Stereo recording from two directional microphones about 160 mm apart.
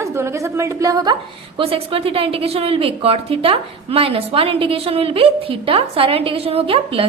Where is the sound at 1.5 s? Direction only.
35° right (ahead or behind).